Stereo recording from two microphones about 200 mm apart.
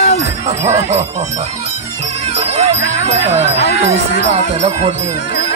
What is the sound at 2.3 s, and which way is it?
Jingle bell, 30° right (ahead or behind).